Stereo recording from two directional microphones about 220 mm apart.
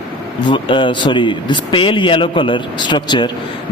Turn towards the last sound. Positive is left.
turn(degrees=20)  # may be behind; listen again after turning